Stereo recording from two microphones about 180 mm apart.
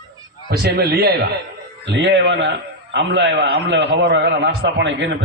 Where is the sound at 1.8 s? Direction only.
75° right (ahead or behind).